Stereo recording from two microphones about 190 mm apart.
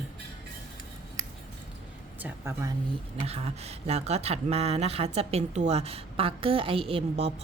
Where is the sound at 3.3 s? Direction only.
35° right (ahead or behind).